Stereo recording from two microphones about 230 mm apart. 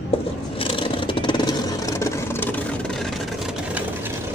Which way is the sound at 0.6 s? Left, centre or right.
Left.